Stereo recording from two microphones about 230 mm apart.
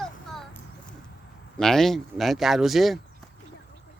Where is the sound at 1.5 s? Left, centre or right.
Centre.